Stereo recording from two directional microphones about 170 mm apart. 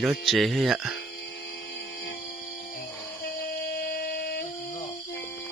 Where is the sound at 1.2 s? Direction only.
75° left (ahead or behind).